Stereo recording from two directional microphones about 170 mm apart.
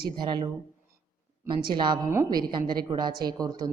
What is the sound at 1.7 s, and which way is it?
A woman's voice, 25° right (ahead or behind).